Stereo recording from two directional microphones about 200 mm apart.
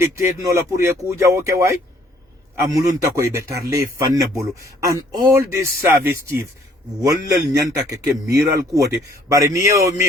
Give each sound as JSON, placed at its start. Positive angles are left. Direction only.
{"t": 0.0, "sound": "a man's voice", "side_deg": -15}
{"t": 2.7, "sound": "a man's voice", "side_deg": -15}